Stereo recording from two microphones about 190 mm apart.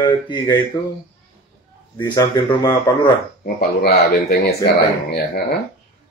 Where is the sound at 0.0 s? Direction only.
25° left (ahead or behind).